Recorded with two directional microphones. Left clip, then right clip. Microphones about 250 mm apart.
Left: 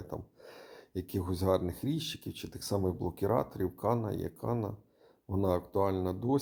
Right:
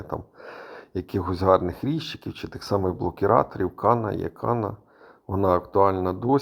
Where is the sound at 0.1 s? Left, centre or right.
Centre.